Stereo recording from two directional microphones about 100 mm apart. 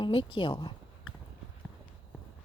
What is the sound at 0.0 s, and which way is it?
Speech, 55° left (ahead or behind).